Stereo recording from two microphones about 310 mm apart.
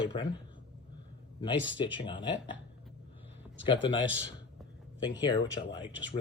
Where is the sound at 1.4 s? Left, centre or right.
Centre.